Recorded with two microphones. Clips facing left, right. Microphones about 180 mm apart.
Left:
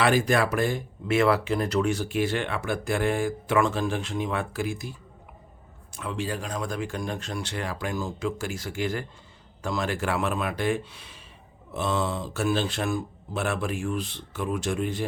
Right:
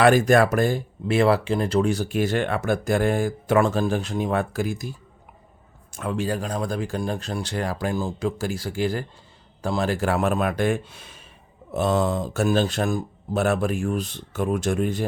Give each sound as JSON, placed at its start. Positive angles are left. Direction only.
{"t": 0.0, "sound": "speech", "side_deg": -45}